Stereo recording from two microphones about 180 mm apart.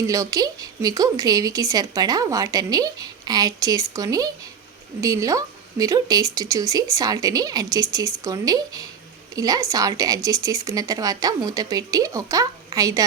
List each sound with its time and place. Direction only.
0.0 s a woman's voice: 20° right (ahead or behind)